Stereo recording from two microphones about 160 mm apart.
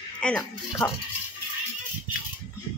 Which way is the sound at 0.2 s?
5° left (ahead or behind).